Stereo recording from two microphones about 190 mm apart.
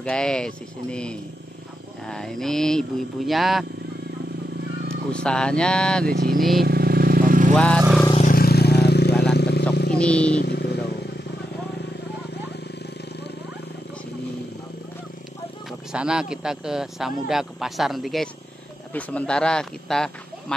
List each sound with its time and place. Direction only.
0.0 s speech: 5° left (ahead or behind)
4.8 s speech: 5° left (ahead or behind)
6.0 s vehicle: 55° right (ahead or behind)
7.5 s speech: 5° left (ahead or behind)
8.2 s vehicle: 50° left (ahead or behind)
9.1 s vehicle: 5° left (ahead or behind)
9.4 s vehicle: 60° left (ahead or behind)
9.9 s speech: 5° left (ahead or behind)
10.4 s vehicle: 60° left (ahead or behind)
15.9 s speech: 5° right (ahead or behind)